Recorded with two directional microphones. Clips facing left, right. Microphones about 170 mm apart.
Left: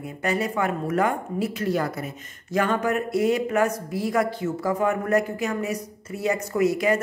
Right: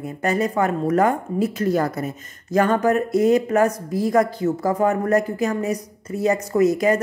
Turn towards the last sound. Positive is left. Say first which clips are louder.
# right 4 dB
turn(degrees=-40)  # may be behind; listen again after turning